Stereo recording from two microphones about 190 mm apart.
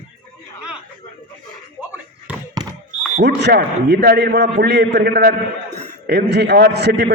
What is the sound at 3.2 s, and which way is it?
A man's voice, 60° right (ahead or behind).